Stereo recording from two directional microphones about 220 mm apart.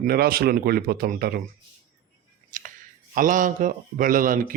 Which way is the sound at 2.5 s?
35° right (ahead or behind).